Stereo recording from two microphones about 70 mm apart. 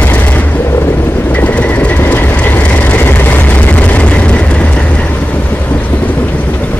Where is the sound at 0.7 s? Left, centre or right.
Left.